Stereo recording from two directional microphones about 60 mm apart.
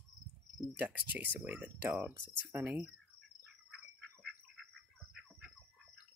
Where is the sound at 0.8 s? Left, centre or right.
Right.